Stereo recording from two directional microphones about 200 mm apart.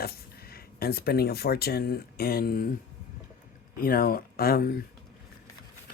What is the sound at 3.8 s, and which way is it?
Speech, 45° left (ahead or behind).